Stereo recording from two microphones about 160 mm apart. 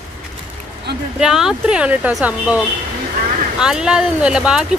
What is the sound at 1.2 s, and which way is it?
Speech, 5° right (ahead or behind).